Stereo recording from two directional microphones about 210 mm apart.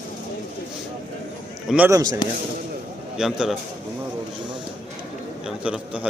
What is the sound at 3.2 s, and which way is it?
Speech, centre (ahead or behind).